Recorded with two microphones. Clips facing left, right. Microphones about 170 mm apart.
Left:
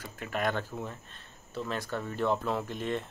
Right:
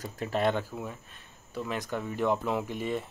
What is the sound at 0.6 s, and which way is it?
Speech, 10° right (ahead or behind).